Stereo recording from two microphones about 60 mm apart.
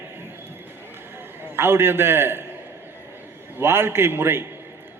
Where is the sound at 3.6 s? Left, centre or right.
Right.